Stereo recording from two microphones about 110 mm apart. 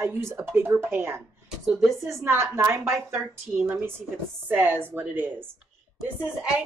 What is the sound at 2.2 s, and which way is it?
Speech, 20° right (ahead or behind).